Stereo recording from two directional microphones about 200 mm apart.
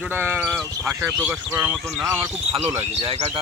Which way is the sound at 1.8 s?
Centre (ahead or behind).